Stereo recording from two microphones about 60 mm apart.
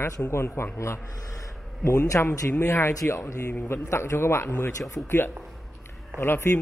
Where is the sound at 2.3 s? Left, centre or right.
Left.